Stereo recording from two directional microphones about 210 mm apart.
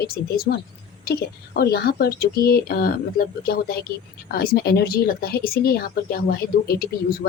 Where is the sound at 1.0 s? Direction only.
50° left (ahead or behind).